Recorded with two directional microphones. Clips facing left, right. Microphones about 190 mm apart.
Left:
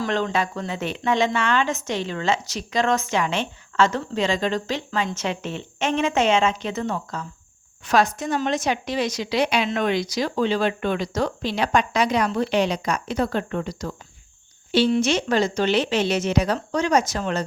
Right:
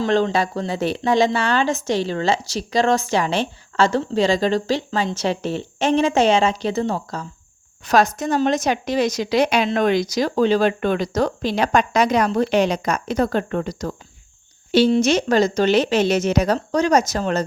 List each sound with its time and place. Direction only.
0.0 s a woman's voice: 35° right (ahead or behind)